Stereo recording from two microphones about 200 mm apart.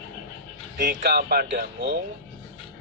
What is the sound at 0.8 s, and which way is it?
Speech, 45° right (ahead or behind).